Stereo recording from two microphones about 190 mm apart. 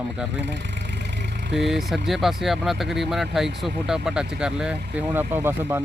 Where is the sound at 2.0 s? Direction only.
Centre (ahead or behind).